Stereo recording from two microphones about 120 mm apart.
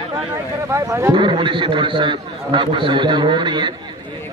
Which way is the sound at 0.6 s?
25° right (ahead or behind).